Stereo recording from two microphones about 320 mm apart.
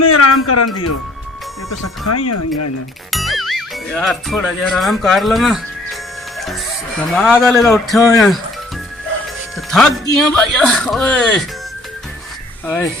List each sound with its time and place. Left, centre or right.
0.0 s speech: left
3.1 s speech: centre
7.1 s speech: centre
9.7 s speech: centre
12.6 s speech: centre